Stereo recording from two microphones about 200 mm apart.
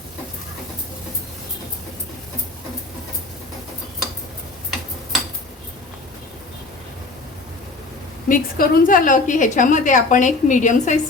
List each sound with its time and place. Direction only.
8.3 s a woman's voice: 45° left (ahead or behind)